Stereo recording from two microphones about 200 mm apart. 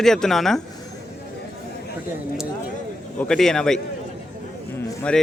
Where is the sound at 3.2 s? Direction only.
5° left (ahead or behind).